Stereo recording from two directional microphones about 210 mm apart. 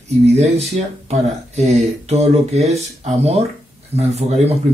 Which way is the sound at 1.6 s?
30° right (ahead or behind).